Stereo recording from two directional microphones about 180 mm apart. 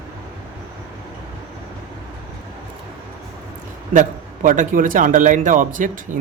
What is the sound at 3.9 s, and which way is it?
A man's voice, 45° right (ahead or behind).